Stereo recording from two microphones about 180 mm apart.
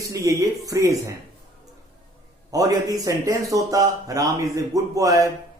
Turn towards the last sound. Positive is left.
turn(degrees=-20)  # may be behind; listen again after turning